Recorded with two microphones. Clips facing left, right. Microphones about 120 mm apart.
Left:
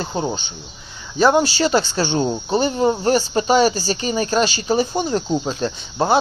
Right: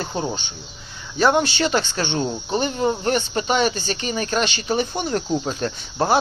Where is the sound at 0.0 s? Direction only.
25° left (ahead or behind).